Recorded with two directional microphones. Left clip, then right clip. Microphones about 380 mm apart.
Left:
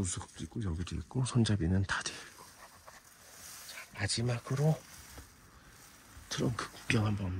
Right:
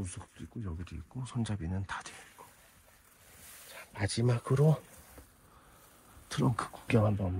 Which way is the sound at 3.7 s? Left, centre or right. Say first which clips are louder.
Left 1 dB; centre.